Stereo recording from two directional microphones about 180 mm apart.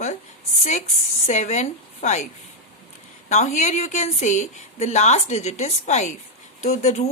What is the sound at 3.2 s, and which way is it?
Speech, 40° left (ahead or behind).